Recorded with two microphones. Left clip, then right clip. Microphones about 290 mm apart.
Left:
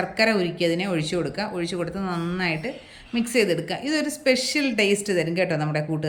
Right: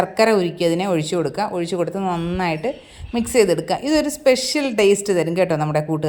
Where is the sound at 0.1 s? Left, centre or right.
Centre.